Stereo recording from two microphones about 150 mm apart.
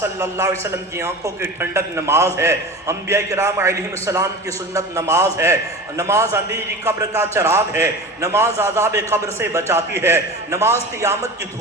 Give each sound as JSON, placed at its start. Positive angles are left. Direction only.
{"t": 0.0, "sound": "a man's voice", "side_deg": -20}